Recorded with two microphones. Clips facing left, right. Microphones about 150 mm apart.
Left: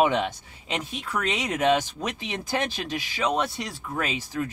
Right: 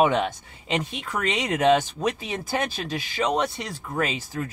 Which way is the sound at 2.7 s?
45° right (ahead or behind).